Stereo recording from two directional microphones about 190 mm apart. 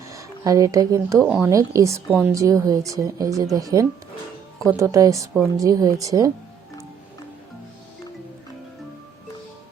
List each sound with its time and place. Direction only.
0.0 s speech: 15° right (ahead or behind)